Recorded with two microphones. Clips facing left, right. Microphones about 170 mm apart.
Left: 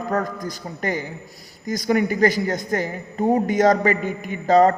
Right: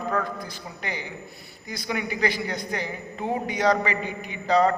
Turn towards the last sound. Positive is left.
turn(degrees=45)  # may be behind; listen again after turning